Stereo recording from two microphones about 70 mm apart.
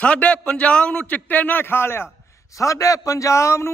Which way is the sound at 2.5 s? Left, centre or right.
Left.